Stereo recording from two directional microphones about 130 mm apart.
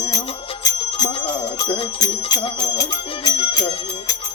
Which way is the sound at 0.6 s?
30° left (ahead or behind).